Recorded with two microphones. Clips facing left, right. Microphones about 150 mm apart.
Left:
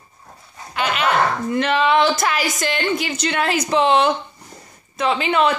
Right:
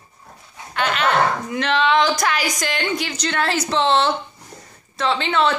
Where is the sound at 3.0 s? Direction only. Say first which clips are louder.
Left 1 dB; 5° left (ahead or behind).